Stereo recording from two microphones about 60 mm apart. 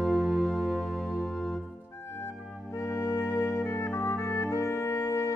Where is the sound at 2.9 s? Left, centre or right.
Left.